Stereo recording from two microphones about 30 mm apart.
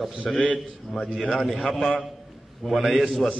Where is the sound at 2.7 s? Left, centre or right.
Centre.